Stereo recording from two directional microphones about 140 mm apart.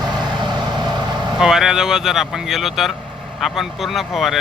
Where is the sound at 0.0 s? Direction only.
30° right (ahead or behind).